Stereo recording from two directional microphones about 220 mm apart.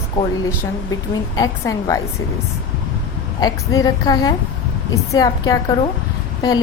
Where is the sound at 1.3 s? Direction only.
15° left (ahead or behind).